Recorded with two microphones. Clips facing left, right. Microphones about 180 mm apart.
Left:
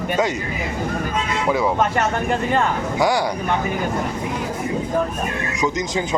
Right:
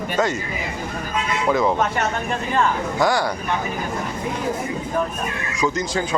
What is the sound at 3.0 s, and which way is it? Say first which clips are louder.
Speech: left 1 dB; 15° left (ahead or behind).